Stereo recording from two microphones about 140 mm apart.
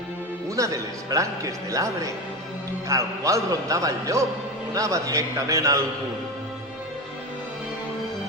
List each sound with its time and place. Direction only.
0.6 s a man's voice: 20° right (ahead or behind)
2.9 s a man's voice: 20° right (ahead or behind)